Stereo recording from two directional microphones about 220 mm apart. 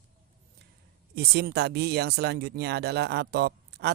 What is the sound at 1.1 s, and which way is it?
Speech, 45° right (ahead or behind).